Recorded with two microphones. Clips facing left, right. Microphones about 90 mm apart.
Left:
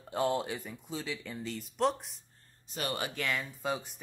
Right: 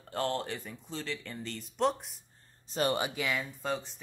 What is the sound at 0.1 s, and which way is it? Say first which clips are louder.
Speech: left 2 dB; 10° left (ahead or behind).